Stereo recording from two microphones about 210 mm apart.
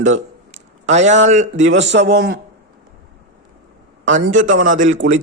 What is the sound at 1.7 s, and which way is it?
Speech, 60° right (ahead or behind).